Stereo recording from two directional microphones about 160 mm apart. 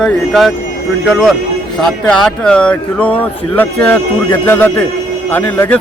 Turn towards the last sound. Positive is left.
turn(degrees=10)  # may be behind; listen again after turning